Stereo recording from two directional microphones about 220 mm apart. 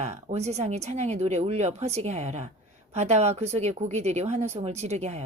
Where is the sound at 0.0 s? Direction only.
30° right (ahead or behind).